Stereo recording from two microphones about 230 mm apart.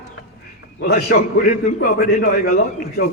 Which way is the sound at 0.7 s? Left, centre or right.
Left.